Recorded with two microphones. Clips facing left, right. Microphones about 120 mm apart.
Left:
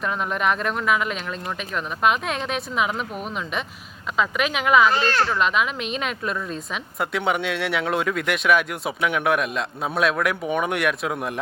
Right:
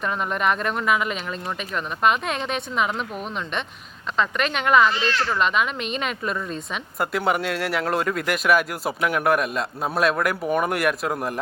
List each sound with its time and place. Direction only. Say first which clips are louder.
0.0 s speech: even; centre (ahead or behind)
4.9 s speech: left 3 dB; 45° left (ahead or behind)
5.3 s speech: even; centre (ahead or behind)